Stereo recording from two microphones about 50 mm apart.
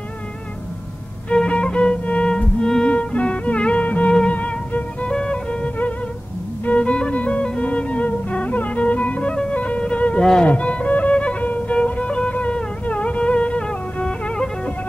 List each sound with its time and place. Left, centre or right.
1.3 s music: left
10.4 s violin: left